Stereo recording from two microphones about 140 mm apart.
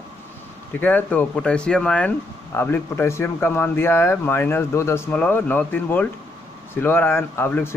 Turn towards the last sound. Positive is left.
turn(degrees=15)  # may be behind; listen again after turning